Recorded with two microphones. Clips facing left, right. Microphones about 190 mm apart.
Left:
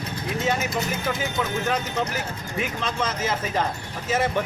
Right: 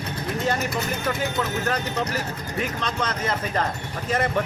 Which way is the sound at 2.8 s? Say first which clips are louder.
Even; 5° left (ahead or behind).